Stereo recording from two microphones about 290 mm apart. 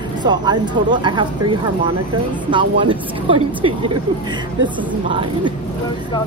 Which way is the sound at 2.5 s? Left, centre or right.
Centre.